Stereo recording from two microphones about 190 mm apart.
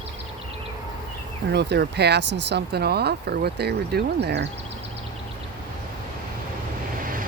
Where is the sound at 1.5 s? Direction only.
60° right (ahead or behind).